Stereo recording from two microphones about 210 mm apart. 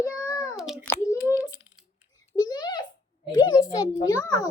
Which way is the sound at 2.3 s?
20° left (ahead or behind).